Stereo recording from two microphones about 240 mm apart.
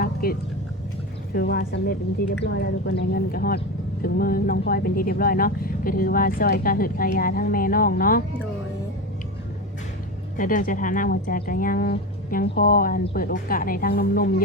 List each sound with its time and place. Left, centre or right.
0.0 s a sound: left
1.3 s a woman's voice: left
10.3 s speech: left